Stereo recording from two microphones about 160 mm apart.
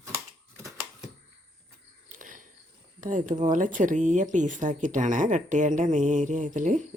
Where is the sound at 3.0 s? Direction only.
55° right (ahead or behind).